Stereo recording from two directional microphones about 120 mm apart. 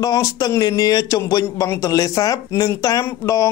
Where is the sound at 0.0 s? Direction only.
30° left (ahead or behind).